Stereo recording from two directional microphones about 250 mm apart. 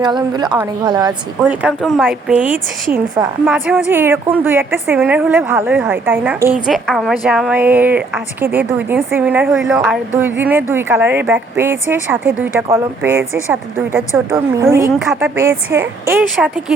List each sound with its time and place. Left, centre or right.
0.0 s a woman's voice: centre
1.4 s a woman's voice: centre